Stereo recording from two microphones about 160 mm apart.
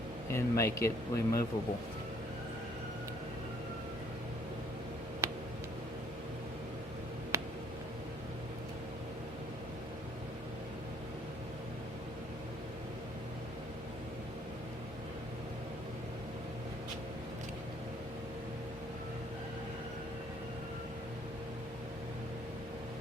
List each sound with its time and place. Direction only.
0.3 s speech: 20° left (ahead or behind)
5.2 s tick: 15° right (ahead or behind)
7.3 s tick: 20° right (ahead or behind)